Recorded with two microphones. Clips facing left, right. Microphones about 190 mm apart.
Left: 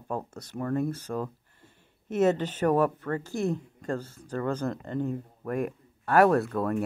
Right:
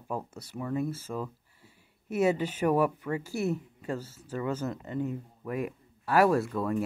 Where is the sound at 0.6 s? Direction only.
50° left (ahead or behind).